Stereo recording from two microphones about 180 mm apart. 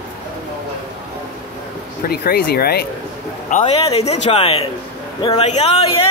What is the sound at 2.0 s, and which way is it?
Speech, 60° left (ahead or behind).